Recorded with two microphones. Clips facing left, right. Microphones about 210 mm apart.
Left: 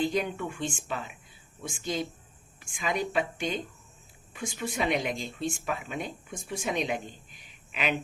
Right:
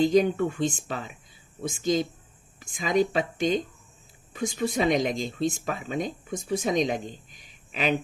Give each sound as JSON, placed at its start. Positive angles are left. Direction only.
{"t": 0.0, "sound": "speech", "side_deg": -40}
{"t": 4.6, "sound": "speech", "side_deg": -40}